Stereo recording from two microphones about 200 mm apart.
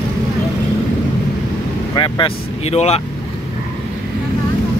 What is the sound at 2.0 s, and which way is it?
Speech, 25° left (ahead or behind).